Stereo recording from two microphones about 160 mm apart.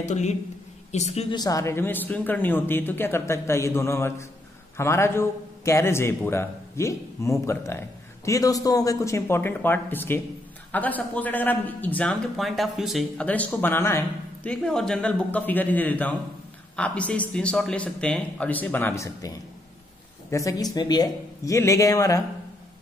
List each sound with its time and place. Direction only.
0.0 s a man's voice: 45° left (ahead or behind)
1.3 s a man's voice: 25° left (ahead or behind); by 13.3 s centre (ahead or behind)
13.3 s a man's voice: 10° left (ahead or behind)
14.5 s a man's voice: 5° left (ahead or behind); by 22.2 s 20° left (ahead or behind)